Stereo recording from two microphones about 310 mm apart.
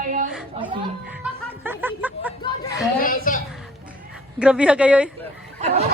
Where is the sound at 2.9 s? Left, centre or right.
Left.